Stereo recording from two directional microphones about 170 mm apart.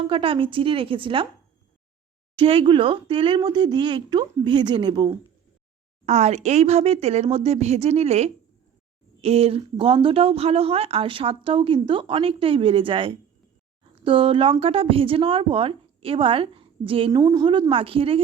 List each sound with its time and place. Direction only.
0.1 s speech: 30° right (ahead or behind)
2.3 s speech: 30° right (ahead or behind)
6.1 s speech: 40° right (ahead or behind)
17.1 s speech: 20° right (ahead or behind)